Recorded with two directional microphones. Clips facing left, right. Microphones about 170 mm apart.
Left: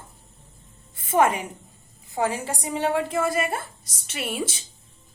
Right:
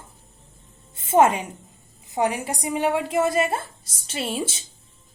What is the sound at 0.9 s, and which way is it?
A woman's voice, 25° right (ahead or behind).